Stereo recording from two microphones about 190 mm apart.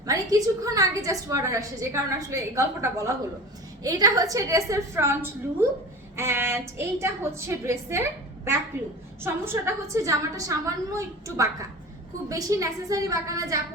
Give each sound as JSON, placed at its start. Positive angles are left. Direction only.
{"t": 0.0, "sound": "a woman's voice", "side_deg": -20}
{"t": 6.1, "sound": "a woman's voice", "side_deg": -15}
{"t": 9.2, "sound": "a woman's voice", "side_deg": -15}